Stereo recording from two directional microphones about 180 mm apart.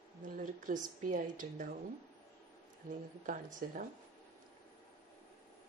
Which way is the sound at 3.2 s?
50° right (ahead or behind).